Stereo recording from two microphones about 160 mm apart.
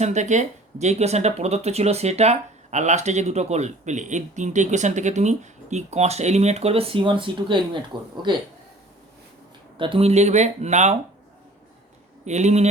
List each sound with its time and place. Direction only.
0.0 s speech: 45° right (ahead or behind); by 7.8 s 30° right (ahead or behind)
9.7 s speech: 30° right (ahead or behind)
12.2 s speech: 45° right (ahead or behind)